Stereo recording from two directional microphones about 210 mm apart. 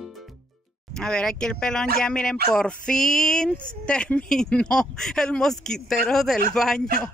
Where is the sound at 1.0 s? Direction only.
5° left (ahead or behind).